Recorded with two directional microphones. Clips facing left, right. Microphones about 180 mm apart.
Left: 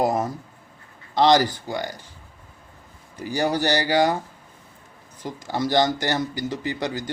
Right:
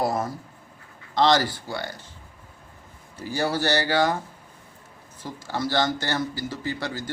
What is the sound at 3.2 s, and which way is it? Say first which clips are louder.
Speech: left 3 dB; 15° left (ahead or behind).